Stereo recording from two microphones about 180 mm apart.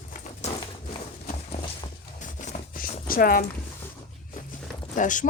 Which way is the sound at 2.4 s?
50° left (ahead or behind).